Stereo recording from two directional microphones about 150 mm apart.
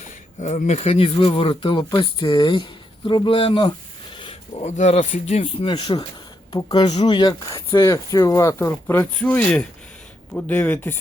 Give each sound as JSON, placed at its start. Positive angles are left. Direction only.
{"t": 0.0, "sound": "speech", "side_deg": 55}
{"t": 4.6, "sound": "speech", "side_deg": 50}
{"t": 5.6, "sound": "speech", "side_deg": 30}